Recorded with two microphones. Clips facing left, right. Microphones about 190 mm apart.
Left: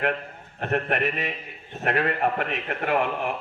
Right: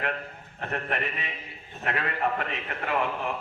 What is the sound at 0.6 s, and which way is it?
A man's voice, 60° left (ahead or behind).